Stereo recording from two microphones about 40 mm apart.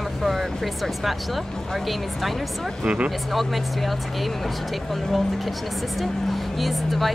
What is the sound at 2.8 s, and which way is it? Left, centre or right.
Speech, right.